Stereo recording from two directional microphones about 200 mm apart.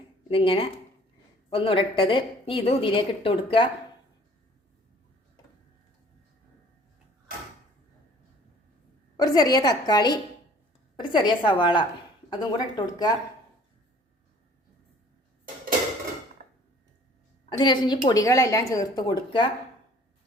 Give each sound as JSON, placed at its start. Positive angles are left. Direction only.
{"t": 0.3, "sound": "a woman's voice", "side_deg": 25}
{"t": 9.1, "sound": "a woman's voice", "side_deg": 20}
{"t": 16.4, "sound": "dishes", "side_deg": -45}
{"t": 17.6, "sound": "a woman's voice", "side_deg": 20}